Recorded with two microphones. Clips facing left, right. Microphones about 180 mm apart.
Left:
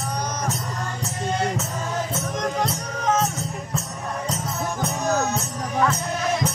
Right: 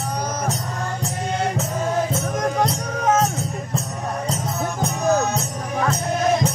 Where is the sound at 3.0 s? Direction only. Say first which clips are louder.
Right 3 dB; 50° right (ahead or behind).